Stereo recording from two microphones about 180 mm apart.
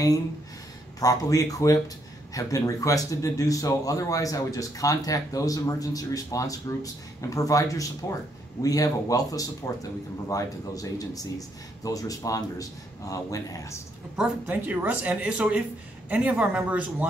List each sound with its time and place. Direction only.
0.9 s speech: 20° left (ahead or behind)
14.1 s speech: 5° right (ahead or behind)